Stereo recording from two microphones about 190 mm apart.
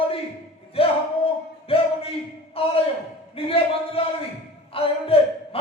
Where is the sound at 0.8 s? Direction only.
30° left (ahead or behind).